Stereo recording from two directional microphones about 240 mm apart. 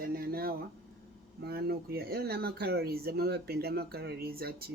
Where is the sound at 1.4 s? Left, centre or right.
Right.